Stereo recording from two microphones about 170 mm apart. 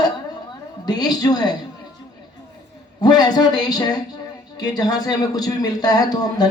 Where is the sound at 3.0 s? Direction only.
25° left (ahead or behind).